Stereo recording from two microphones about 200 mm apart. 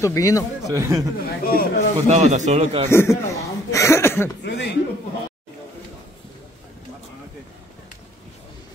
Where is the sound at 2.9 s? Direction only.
15° left (ahead or behind).